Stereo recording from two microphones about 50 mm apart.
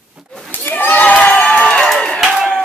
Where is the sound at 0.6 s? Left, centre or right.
Left.